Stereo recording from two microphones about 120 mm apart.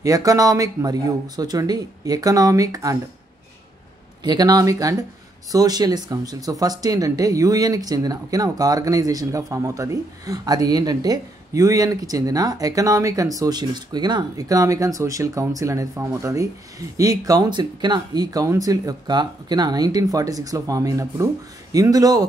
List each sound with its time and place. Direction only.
0.0 s speech: 30° right (ahead or behind)
4.2 s speech: 35° right (ahead or behind)